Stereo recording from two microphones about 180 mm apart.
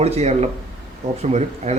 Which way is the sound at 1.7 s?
40° right (ahead or behind).